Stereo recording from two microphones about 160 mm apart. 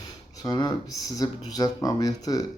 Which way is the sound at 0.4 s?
25° left (ahead or behind).